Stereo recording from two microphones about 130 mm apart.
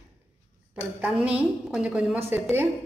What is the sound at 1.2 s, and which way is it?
A woman's voice, 10° right (ahead or behind).